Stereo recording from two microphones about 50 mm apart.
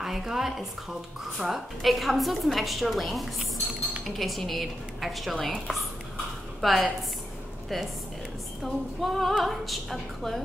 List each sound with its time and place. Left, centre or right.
0.0 s a woman's voice: centre